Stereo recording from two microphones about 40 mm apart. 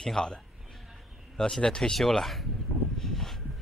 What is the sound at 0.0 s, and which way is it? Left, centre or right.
Speech, centre.